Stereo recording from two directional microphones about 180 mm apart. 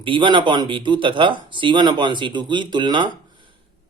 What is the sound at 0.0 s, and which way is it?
Speech, 25° right (ahead or behind).